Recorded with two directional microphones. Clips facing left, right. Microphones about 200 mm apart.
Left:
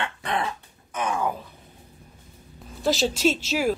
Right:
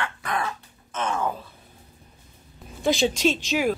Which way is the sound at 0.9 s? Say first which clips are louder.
Even; 15° left (ahead or behind).